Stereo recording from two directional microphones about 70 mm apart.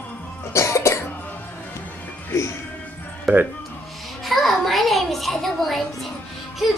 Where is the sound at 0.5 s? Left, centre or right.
Left.